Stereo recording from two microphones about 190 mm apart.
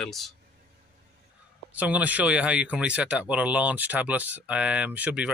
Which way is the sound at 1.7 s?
10° right (ahead or behind).